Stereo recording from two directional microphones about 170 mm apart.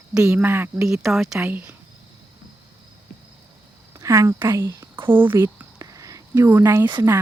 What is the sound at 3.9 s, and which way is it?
Speech, 20° right (ahead or behind).